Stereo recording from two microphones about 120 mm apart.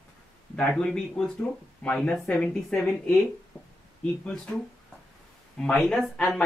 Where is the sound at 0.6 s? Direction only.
5° left (ahead or behind).